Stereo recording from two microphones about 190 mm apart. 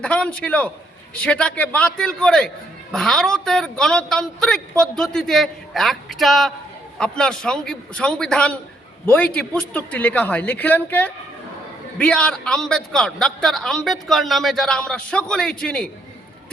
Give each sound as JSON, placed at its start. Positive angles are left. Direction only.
{"t": 0.0, "sound": "a woman's voice", "side_deg": 5}